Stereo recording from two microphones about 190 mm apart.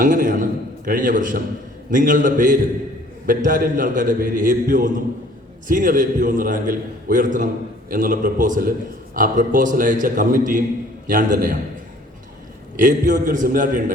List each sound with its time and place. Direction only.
0.0 s a sound: 45° right (ahead or behind)
0.9 s a man's voice: 45° right (ahead or behind)
12.7 s a man's voice: 45° right (ahead or behind)